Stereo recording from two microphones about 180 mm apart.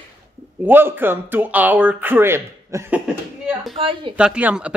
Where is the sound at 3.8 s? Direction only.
30° right (ahead or behind).